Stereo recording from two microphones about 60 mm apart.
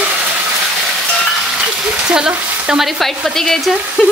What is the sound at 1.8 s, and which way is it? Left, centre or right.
Frying, centre.